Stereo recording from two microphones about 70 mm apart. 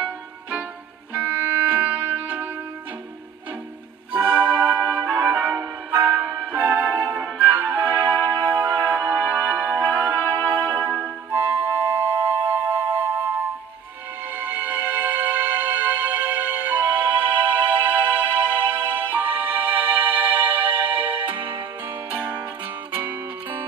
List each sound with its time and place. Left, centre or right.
0.0 s music: right
4.1 s music: centre
10.3 s music: left
11.3 s music: right
22.9 s music: right